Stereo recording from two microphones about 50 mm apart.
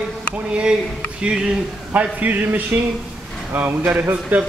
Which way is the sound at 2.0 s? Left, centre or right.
Right.